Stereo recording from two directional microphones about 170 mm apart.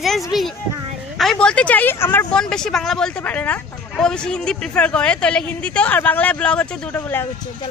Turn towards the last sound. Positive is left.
turn(degrees=15)  # may be behind; listen again after turning